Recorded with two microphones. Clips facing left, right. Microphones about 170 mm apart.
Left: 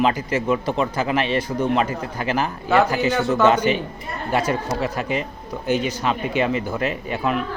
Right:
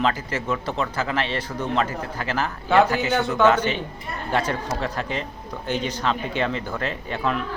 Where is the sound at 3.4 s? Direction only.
15° left (ahead or behind).